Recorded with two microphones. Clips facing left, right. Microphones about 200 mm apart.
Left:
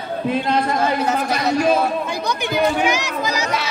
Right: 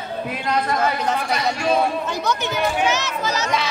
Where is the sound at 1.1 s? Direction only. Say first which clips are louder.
Left 4 dB; 40° left (ahead or behind).